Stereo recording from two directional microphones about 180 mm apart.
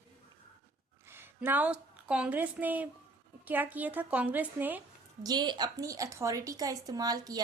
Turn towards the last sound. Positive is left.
turn(degrees=-20)  # may be behind; listen again after turning